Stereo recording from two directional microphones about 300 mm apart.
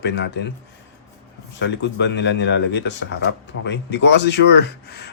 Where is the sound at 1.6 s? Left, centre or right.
Left.